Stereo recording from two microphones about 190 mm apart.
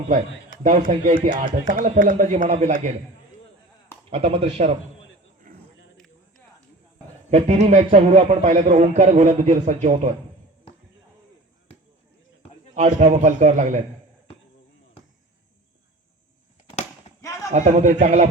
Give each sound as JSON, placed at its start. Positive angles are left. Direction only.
{"t": 0.6, "sound": "speech", "side_deg": -45}
{"t": 4.1, "sound": "a man's voice", "side_deg": -30}
{"t": 5.5, "sound": "a sound", "side_deg": -45}
{"t": 7.3, "sound": "a man's voice", "side_deg": -30}
{"t": 12.7, "sound": "a man's voice", "side_deg": -40}
{"t": 17.1, "sound": "a sound", "side_deg": 35}
{"t": 17.5, "sound": "a man's voice", "side_deg": -40}